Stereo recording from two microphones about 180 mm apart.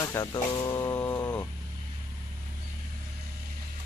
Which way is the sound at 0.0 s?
20° left (ahead or behind).